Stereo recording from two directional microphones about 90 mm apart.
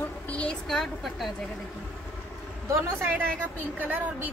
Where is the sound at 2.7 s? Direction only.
25° right (ahead or behind).